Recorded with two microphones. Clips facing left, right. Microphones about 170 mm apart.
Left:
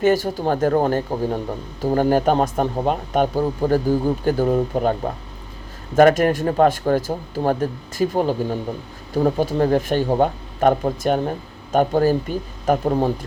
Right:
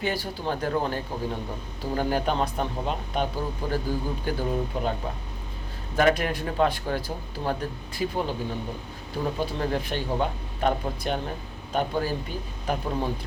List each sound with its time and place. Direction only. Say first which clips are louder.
0.0 s speech: left 11 dB; 45° left (ahead or behind)